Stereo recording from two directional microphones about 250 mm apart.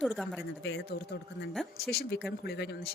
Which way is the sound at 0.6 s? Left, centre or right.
Left.